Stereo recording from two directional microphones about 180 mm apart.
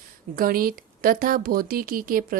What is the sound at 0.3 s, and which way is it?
A woman's voice, 55° right (ahead or behind).